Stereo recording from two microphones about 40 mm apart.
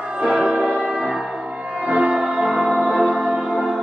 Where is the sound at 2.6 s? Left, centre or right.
Right.